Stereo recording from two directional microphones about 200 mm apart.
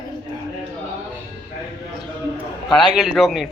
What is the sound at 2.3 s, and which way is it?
A man's voice, centre (ahead or behind).